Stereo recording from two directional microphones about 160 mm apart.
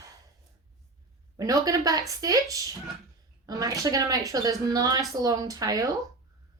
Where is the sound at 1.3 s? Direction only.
20° right (ahead or behind).